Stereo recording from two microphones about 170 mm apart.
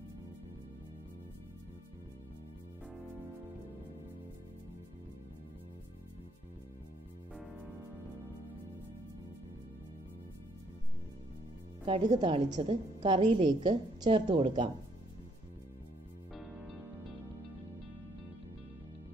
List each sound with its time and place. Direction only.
11.8 s a woman's voice: 25° right (ahead or behind)
16.3 s music: centre (ahead or behind)